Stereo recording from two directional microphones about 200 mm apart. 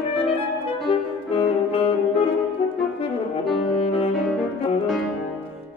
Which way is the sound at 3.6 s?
30° left (ahead or behind).